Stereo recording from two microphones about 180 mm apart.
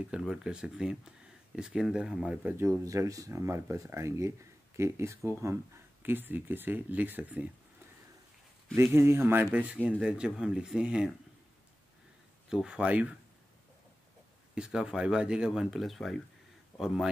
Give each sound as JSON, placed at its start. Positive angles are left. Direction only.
{"t": 0.1, "sound": "speech", "side_deg": -5}
{"t": 8.7, "sound": "speech", "side_deg": -15}
{"t": 12.4, "sound": "speech", "side_deg": -5}
{"t": 14.5, "sound": "speech", "side_deg": -5}